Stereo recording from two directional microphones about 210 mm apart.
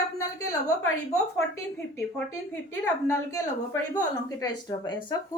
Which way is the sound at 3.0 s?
15° left (ahead or behind).